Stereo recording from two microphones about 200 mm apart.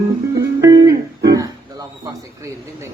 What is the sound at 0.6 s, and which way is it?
Music, 15° right (ahead or behind).